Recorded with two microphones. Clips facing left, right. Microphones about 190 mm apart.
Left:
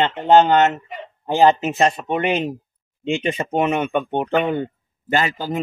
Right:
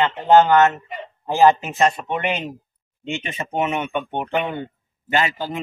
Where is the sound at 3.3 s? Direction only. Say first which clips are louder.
Left 3 dB; 40° left (ahead or behind).